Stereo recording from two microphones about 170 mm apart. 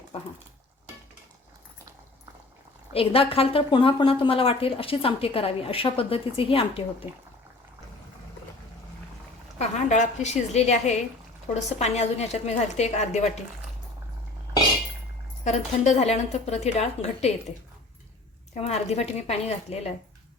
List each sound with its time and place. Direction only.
2.9 s a woman's voice: 35° left (ahead or behind)
9.6 s a woman's voice: 45° left (ahead or behind)
15.4 s a woman's voice: 40° left (ahead or behind)
18.5 s a woman's voice: 40° left (ahead or behind)